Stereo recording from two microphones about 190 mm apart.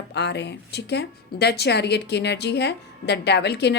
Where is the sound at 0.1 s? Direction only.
65° left (ahead or behind).